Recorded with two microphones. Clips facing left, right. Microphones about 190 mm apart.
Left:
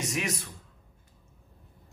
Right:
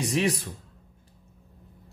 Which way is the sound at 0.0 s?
30° right (ahead or behind).